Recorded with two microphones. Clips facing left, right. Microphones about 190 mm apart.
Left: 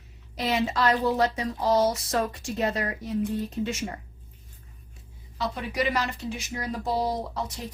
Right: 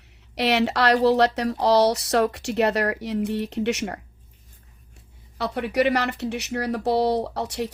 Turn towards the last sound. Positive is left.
turn(degrees=-70)  # may be behind; listen again after turning